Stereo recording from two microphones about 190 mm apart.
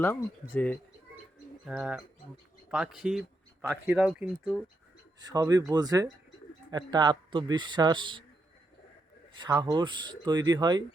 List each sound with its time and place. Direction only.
0.0 s speech: 10° left (ahead or behind)
1.6 s speech: 5° right (ahead or behind)
5.2 s speech: 20° right (ahead or behind)
9.3 s speech: 20° right (ahead or behind)